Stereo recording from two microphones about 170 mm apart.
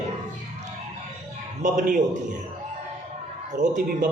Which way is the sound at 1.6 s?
45° right (ahead or behind).